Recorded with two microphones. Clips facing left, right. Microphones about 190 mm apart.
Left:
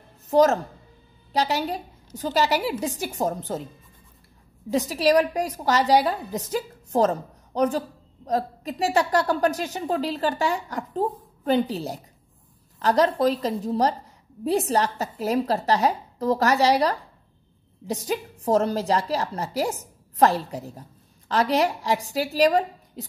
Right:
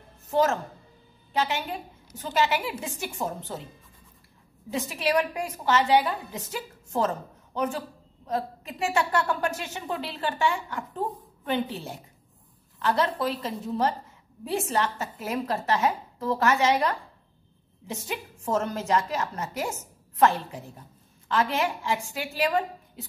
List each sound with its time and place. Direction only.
0.3 s a woman's voice: 40° left (ahead or behind)
4.6 s a woman's voice: 40° left (ahead or behind)